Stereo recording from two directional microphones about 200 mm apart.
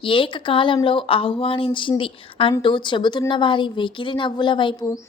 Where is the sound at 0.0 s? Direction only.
25° left (ahead or behind).